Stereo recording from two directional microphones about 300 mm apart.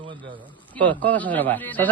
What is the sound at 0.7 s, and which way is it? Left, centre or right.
Speech, centre.